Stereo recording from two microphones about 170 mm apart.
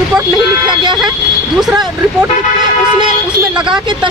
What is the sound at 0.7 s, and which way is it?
Speech, 25° right (ahead or behind).